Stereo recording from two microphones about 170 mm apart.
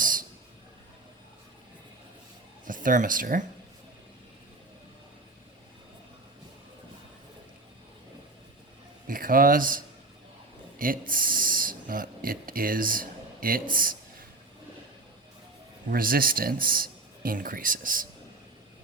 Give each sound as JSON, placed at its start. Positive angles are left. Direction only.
{"t": 0.0, "sound": "a sound", "side_deg": -55}
{"t": 2.6, "sound": "speech", "side_deg": -50}
{"t": 9.0, "sound": "speech", "side_deg": -55}
{"t": 15.9, "sound": "a man's voice", "side_deg": -60}